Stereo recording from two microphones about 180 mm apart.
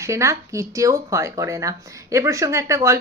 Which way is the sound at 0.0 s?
15° right (ahead or behind).